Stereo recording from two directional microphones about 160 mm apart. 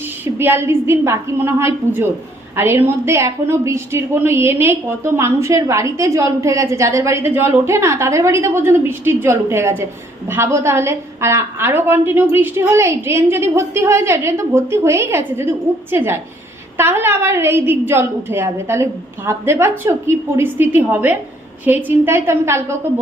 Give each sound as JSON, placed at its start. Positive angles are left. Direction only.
{"t": 0.3, "sound": "a woman's voice", "side_deg": -15}